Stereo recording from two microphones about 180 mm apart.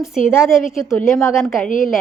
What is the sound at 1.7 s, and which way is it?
Speech, 45° left (ahead or behind).